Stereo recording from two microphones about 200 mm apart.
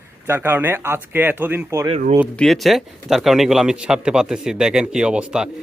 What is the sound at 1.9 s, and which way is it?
Speech, 30° right (ahead or behind).